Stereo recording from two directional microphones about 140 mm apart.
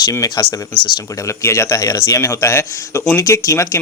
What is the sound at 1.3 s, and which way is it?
Speech, 20° left (ahead or behind).